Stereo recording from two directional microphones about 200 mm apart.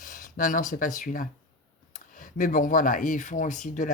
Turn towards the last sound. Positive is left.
turn(degrees=40)  # may be behind; listen again after turning